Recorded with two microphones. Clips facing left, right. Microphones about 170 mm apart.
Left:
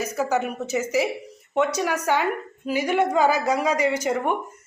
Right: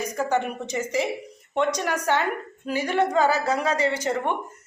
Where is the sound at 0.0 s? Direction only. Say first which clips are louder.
Left 1 dB; 5° left (ahead or behind).